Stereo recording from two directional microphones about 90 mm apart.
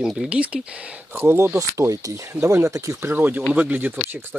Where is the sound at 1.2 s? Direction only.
25° right (ahead or behind).